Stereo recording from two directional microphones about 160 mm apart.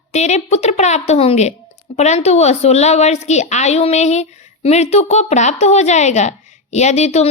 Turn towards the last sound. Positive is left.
turn(degrees=45)  # may be behind; listen again after turning